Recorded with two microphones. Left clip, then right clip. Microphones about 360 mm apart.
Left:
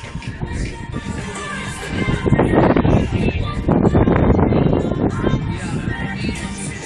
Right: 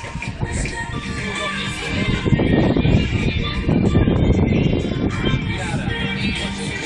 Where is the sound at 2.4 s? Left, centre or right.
Left.